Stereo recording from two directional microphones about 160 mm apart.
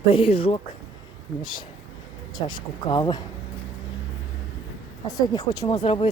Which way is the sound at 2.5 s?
30° left (ahead or behind).